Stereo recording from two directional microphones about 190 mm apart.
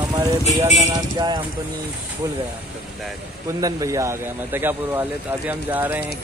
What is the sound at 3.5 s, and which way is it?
Speech, 15° right (ahead or behind).